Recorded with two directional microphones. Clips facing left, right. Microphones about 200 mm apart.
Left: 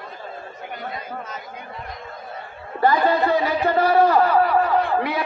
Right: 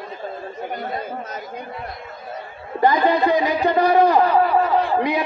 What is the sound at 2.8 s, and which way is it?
A man's voice, 15° right (ahead or behind).